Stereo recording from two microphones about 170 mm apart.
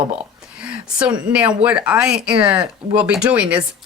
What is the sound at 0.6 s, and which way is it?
Speech, 5° right (ahead or behind).